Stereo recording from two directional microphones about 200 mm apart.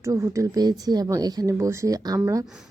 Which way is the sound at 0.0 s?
15° right (ahead or behind).